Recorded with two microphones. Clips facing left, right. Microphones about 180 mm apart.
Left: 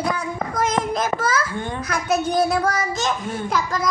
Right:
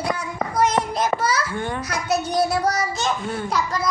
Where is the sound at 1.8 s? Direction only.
55° left (ahead or behind).